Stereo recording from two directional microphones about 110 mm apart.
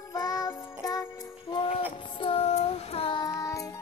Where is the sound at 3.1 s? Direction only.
35° left (ahead or behind).